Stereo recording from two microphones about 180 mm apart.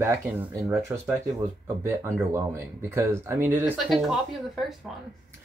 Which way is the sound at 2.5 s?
15° right (ahead or behind).